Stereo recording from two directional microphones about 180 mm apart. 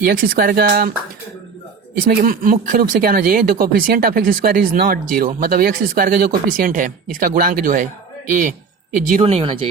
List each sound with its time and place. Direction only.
0.0 s speech: 55° right (ahead or behind)
2.0 s speech: 55° right (ahead or behind)
9.2 s speech: 30° right (ahead or behind)